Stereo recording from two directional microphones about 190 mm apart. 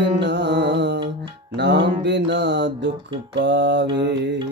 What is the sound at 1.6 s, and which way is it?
Music, 65° right (ahead or behind).